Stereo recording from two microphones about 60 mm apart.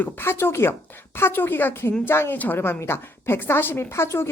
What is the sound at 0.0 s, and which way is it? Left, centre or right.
A woman's voice, left.